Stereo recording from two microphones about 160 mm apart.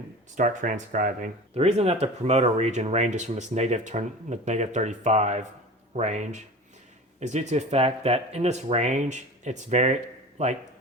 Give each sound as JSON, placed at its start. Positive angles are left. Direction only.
{"t": 0.3, "sound": "speech", "side_deg": -55}
{"t": 1.5, "sound": "speech", "side_deg": -40}